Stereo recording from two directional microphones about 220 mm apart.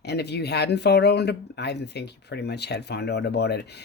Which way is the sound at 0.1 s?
50° left (ahead or behind).